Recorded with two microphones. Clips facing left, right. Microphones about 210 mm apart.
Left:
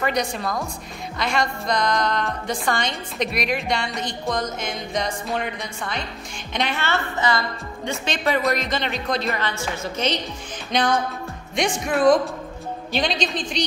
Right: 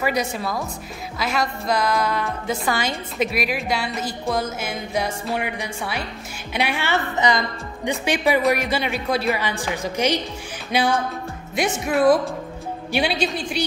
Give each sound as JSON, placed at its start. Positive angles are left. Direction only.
{"t": 0.0, "sound": "a woman's voice", "side_deg": -5}